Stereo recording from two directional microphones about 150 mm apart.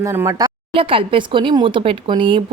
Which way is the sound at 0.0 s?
20° right (ahead or behind).